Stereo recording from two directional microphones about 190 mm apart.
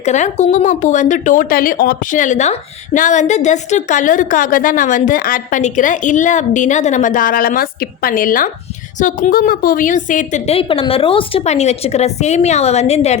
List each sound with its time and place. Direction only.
0.0 s a woman's voice: 35° left (ahead or behind)